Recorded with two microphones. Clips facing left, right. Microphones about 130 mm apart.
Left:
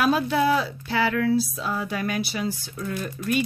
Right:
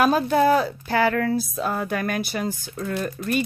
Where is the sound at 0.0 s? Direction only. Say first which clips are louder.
Right 3 dB; 45° right (ahead or behind).